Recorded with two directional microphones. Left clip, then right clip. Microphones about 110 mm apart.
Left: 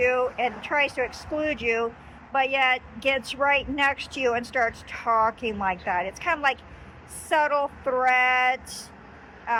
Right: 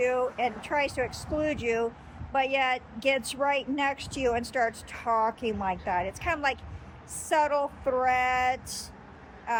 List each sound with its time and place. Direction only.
0.0 s speech: 30° right (ahead or behind)